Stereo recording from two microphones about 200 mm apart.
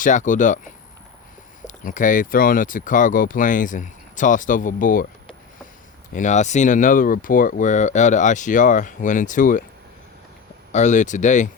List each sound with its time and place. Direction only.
0.0 s speech: 40° left (ahead or behind)
6.1 s speech: 35° left (ahead or behind)
10.7 s speech: 35° left (ahead or behind)